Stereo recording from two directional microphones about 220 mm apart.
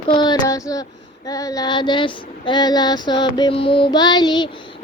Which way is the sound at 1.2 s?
15° left (ahead or behind).